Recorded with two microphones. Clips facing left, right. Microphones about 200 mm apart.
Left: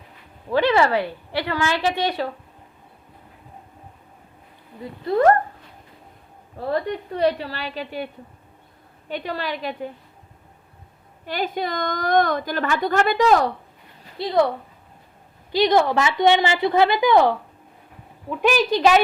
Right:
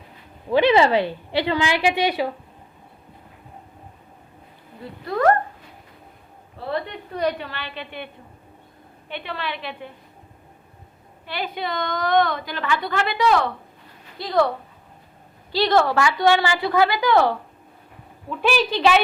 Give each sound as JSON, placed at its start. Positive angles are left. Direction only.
{"t": 0.5, "sound": "a woman's voice", "side_deg": -20}
{"t": 5.0, "sound": "a woman's voice", "side_deg": 25}
{"t": 6.6, "sound": "a woman's voice", "side_deg": 40}
{"t": 11.3, "sound": "a woman's voice", "side_deg": 45}
{"t": 14.2, "sound": "a woman's voice", "side_deg": 25}
{"t": 15.5, "sound": "a woman's voice", "side_deg": 15}